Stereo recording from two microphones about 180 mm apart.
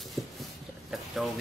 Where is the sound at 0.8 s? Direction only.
Centre (ahead or behind).